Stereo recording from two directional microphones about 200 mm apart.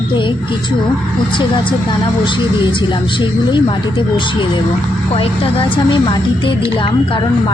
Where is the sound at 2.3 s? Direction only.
25° left (ahead or behind).